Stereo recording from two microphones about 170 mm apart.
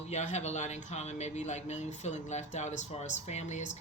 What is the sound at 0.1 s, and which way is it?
Speech, 40° left (ahead or behind).